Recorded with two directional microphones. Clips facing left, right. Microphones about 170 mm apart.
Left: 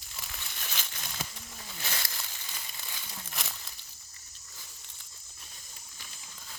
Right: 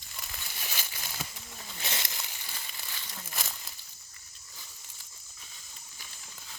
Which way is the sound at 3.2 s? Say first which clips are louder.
Right 1 dB; centre (ahead or behind).